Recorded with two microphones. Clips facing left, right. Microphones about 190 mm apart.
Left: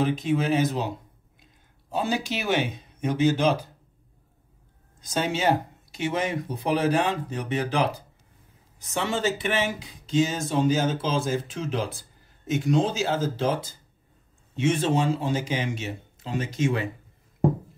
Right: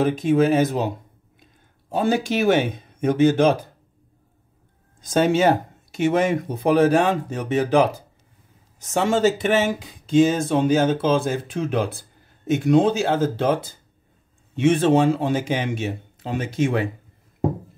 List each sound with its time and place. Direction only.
0.0 s speech: 50° right (ahead or behind)
5.0 s speech: 50° right (ahead or behind)
8.9 s speech: 45° right (ahead or behind)